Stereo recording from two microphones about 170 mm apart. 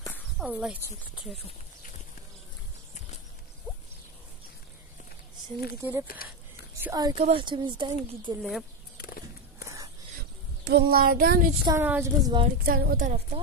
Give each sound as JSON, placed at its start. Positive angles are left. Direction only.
{"t": 0.4, "sound": "speech", "side_deg": -5}
{"t": 5.8, "sound": "a woman's voice", "side_deg": -15}
{"t": 7.2, "sound": "speech", "side_deg": -35}
{"t": 8.4, "sound": "speech", "side_deg": 0}
{"t": 10.6, "sound": "child singing", "side_deg": -65}
{"t": 11.6, "sound": "a woman's voice", "side_deg": -15}
{"t": 12.2, "sound": "speech", "side_deg": -25}
{"t": 12.6, "sound": "child singing", "side_deg": -60}